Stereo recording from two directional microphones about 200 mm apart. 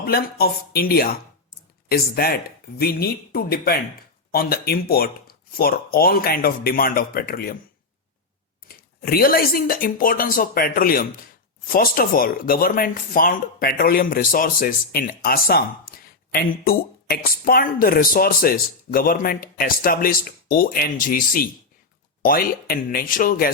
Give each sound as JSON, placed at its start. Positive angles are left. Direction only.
{"t": 0.0, "sound": "speech", "side_deg": 50}
{"t": 8.6, "sound": "speech", "side_deg": 50}